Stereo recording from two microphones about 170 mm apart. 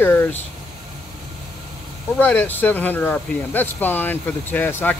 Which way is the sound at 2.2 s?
10° left (ahead or behind).